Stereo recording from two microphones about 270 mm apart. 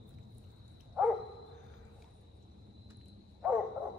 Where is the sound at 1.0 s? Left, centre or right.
Centre.